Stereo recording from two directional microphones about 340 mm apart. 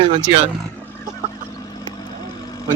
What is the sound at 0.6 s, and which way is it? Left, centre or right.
Vehicle, centre.